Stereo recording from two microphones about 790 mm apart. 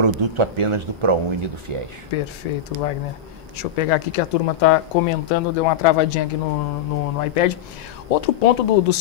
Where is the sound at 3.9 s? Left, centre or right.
Left.